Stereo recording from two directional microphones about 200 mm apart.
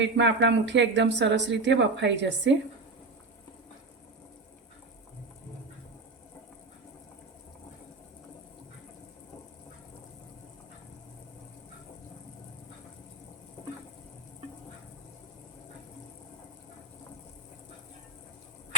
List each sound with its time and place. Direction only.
0.0 s speech: 65° right (ahead or behind)